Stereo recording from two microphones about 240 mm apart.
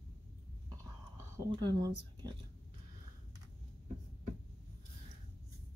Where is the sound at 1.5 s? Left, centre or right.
Centre.